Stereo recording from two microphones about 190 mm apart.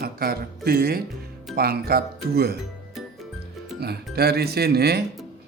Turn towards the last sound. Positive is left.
turn(degrees=-55)  # may be behind; listen again after turning